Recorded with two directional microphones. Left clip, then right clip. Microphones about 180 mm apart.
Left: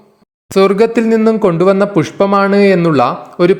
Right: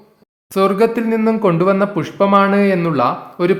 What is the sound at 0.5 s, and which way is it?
Speech, 30° left (ahead or behind).